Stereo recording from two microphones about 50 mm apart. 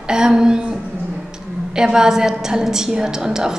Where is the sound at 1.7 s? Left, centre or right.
Centre.